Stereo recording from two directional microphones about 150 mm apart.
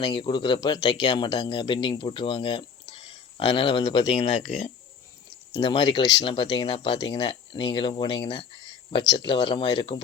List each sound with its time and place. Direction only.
0.0 s speech: 30° left (ahead or behind)
4.2 s speech: 45° left (ahead or behind)
5.5 s speech: 30° left (ahead or behind)